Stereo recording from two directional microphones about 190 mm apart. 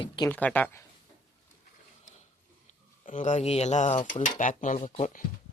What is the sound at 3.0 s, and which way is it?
Speech, 40° left (ahead or behind).